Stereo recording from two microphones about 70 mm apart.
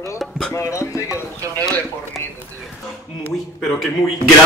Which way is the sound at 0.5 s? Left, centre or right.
Left.